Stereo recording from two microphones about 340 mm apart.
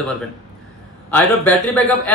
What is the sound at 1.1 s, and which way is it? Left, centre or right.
Speech, centre.